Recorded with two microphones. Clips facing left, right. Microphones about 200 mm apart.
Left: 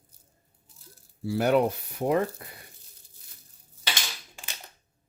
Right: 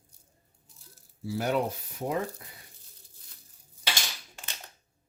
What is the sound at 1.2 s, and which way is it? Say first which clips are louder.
Speech: left 6 dB; 65° left (ahead or behind).